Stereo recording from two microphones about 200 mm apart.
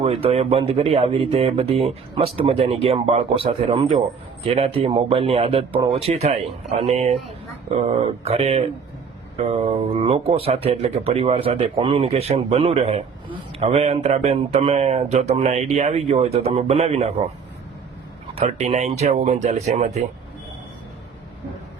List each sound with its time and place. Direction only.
0.0 s speech: 30° right (ahead or behind)
18.3 s speech: 35° right (ahead or behind)